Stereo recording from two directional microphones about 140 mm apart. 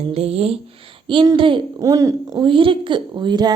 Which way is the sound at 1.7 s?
25° right (ahead or behind).